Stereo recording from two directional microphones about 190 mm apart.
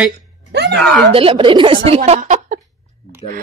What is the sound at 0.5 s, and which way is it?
Groan, 65° right (ahead or behind).